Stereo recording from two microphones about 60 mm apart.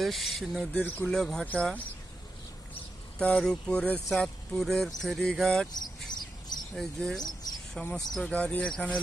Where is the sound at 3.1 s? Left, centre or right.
Centre.